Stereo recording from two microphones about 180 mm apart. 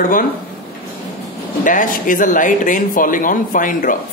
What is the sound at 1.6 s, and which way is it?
Speech, 45° left (ahead or behind).